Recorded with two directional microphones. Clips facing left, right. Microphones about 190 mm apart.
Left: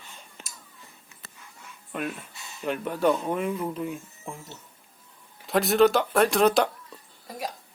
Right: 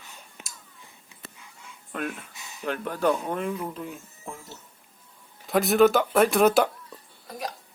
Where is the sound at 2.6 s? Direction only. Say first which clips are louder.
Left 1 dB; 5° left (ahead or behind).